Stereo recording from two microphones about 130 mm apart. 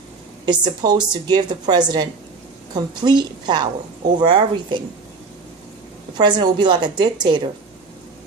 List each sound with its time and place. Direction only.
0.4 s a woman's voice: 35° right (ahead or behind)
6.1 s a woman's voice: 35° right (ahead or behind)